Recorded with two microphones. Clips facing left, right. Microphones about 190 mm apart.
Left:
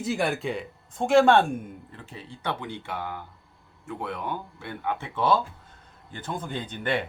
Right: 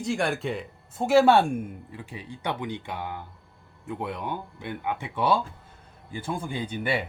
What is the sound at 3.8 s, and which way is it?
Speech, 20° right (ahead or behind).